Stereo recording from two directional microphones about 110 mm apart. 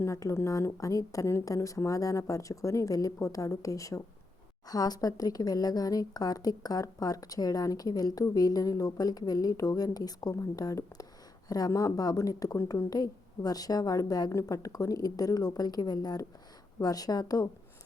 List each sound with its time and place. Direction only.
0.0 s a woman's voice: 25° left (ahead or behind)